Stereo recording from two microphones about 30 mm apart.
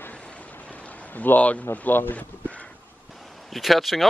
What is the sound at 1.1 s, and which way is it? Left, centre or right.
Speech, left.